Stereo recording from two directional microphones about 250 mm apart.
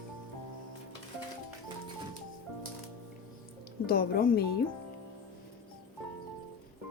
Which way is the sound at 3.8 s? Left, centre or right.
Left.